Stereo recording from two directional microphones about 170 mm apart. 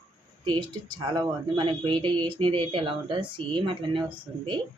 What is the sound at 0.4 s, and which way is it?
Speech, 30° right (ahead or behind).